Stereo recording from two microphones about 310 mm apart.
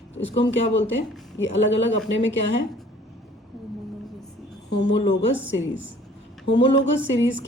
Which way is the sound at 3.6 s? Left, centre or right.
Centre.